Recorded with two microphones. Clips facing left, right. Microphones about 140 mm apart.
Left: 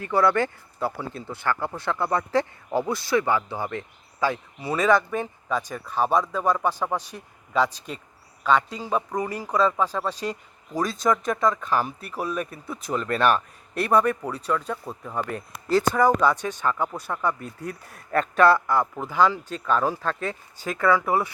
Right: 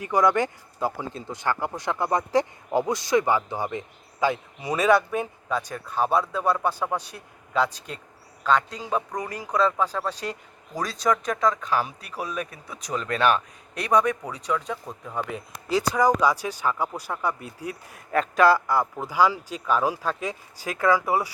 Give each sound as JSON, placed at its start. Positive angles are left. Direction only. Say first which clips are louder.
{"t": 0.0, "sound": "speech", "louder": "even", "side_deg": -15}
{"t": 5.5, "sound": "speech", "louder": "left 3 dB", "side_deg": 10}
{"t": 6.1, "sound": "speech", "louder": "left 1 dB", "side_deg": -10}
{"t": 7.5, "sound": "speech", "louder": "left 1 dB", "side_deg": 10}